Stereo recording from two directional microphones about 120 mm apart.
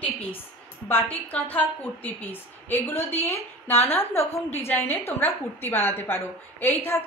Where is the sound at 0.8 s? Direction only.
15° left (ahead or behind).